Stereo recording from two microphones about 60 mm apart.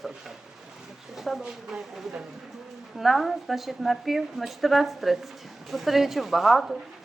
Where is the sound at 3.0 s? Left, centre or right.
Centre.